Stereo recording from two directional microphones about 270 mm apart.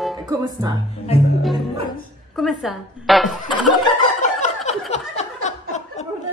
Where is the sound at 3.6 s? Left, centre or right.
Left.